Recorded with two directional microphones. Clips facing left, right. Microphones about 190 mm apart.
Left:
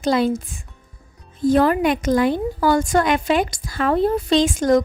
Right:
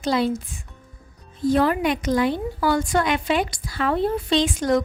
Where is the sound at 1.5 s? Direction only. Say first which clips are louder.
Left 3 dB; 45° left (ahead or behind).